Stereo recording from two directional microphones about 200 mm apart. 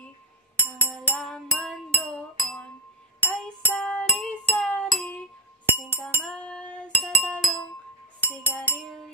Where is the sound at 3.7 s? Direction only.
5° left (ahead or behind).